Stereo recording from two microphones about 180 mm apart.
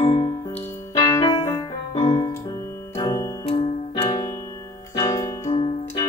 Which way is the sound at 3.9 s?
20° left (ahead or behind).